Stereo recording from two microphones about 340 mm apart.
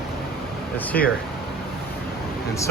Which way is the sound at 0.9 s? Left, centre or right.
Left.